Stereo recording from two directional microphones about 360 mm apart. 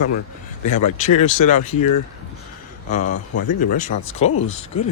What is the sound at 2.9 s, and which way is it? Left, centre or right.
A man's voice, centre.